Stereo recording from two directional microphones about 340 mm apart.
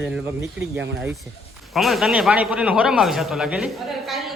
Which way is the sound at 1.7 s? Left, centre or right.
Centre.